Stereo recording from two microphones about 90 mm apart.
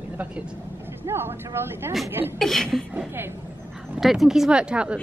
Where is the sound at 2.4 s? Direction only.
5° left (ahead or behind).